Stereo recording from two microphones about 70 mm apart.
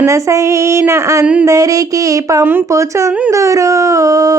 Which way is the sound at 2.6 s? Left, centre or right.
Right.